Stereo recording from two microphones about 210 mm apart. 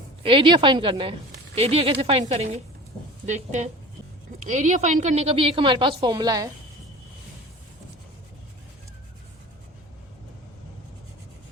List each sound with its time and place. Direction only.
0.2 s a woman's voice: 25° right (ahead or behind)